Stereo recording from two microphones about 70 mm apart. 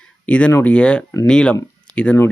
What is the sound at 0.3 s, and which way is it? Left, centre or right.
Speech, centre.